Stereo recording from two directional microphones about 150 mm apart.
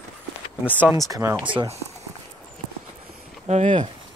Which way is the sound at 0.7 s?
15° right (ahead or behind).